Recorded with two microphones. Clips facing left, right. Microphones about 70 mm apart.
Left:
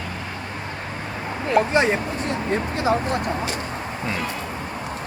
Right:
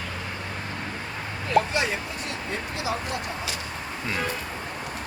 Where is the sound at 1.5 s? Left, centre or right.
Left.